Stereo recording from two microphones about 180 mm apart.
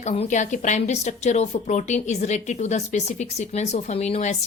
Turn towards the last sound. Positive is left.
turn(degrees=40)  # may be behind; listen again after turning